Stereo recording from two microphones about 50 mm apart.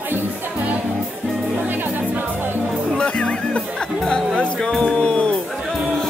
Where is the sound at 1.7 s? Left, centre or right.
Right.